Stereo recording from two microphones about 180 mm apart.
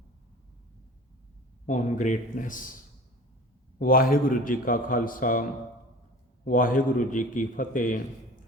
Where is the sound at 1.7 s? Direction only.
45° left (ahead or behind).